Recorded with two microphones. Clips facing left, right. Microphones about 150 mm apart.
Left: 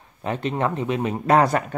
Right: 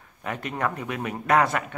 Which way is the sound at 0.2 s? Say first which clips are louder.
Left 5 dB; 25° left (ahead or behind).